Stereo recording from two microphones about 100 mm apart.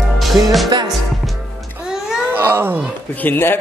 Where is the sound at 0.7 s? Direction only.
50° right (ahead or behind).